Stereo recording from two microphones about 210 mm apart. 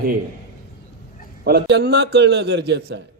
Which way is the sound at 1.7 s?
55° right (ahead or behind).